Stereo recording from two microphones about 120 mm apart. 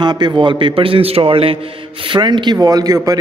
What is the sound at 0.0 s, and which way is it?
A man's voice, 35° right (ahead or behind).